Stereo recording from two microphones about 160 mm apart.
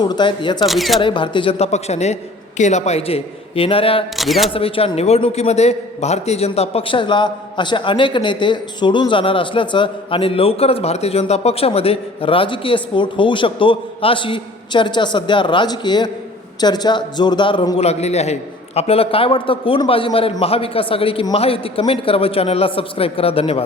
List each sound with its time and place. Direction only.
0.0 s speech: 25° left (ahead or behind)
0.6 s speech: centre (ahead or behind)
0.9 s a man's voice: 30° left (ahead or behind)
4.2 s speech: centre (ahead or behind)
4.5 s a man's voice: 35° left (ahead or behind)